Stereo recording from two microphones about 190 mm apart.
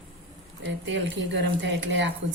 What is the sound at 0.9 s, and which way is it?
A woman's voice, 70° right (ahead or behind).